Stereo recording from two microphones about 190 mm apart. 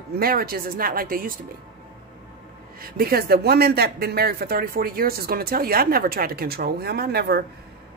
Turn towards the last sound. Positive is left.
turn(degrees=-55)  # may be behind; listen again after turning